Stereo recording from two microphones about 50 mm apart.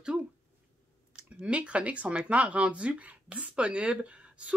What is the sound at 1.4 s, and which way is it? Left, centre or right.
Speech, right.